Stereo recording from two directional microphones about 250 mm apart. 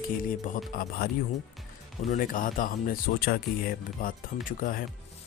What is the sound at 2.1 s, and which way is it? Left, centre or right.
Speech, left.